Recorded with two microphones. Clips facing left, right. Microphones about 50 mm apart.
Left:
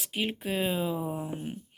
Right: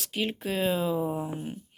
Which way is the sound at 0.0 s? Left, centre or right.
Centre.